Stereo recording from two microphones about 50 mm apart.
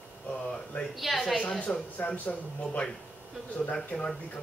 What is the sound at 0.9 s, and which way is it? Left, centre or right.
Speech, centre.